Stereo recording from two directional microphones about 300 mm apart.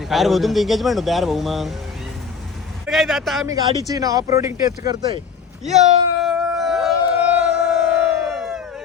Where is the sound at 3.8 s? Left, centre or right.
Centre.